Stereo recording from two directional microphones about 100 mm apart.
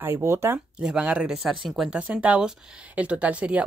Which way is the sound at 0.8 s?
10° right (ahead or behind).